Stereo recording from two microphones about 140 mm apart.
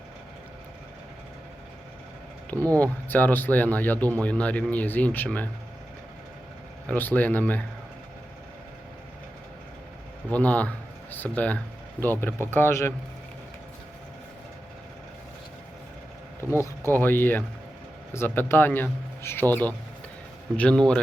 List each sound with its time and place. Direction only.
2.7 s speech: 10° left (ahead or behind)
6.8 s speech: 10° left (ahead or behind)
10.2 s speech: 10° left (ahead or behind)
16.5 s speech: 20° left (ahead or behind)